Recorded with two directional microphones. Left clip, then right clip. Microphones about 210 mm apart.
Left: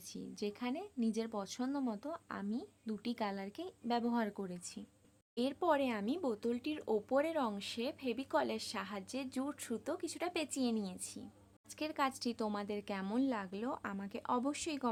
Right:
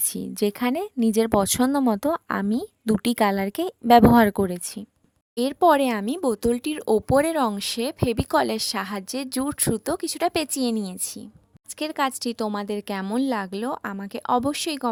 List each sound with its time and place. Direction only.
0.1 s a woman's voice: 50° right (ahead or behind)